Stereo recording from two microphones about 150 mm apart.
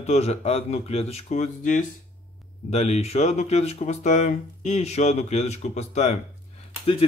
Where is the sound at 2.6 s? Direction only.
45° left (ahead or behind).